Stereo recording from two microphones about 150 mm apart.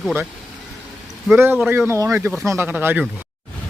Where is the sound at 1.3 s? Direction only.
15° right (ahead or behind).